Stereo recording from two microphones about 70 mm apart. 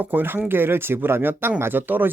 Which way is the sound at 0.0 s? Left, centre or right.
Right.